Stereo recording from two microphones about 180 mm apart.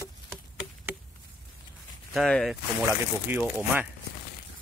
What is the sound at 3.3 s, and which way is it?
Speech, 10° right (ahead or behind).